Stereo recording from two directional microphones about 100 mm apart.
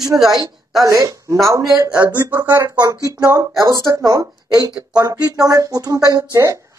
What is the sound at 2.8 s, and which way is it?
Speech, 35° right (ahead or behind).